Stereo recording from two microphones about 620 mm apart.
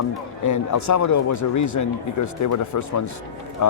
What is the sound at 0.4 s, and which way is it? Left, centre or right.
A man's voice, left.